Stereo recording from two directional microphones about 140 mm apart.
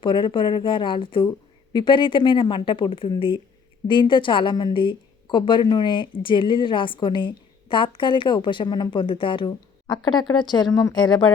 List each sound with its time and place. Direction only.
0.0 s a woman's voice: 35° left (ahead or behind)